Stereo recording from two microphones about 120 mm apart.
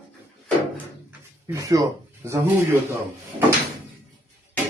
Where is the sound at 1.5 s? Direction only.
25° right (ahead or behind).